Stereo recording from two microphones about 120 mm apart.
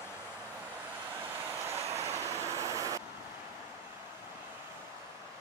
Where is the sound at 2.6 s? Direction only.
30° right (ahead or behind).